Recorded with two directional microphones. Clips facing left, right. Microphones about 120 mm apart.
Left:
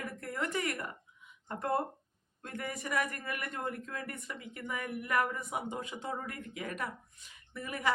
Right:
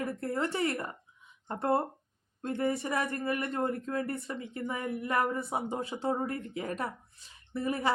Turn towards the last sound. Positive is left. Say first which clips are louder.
# right 4 dB
turn(degrees=-30)  # may be behind; listen again after turning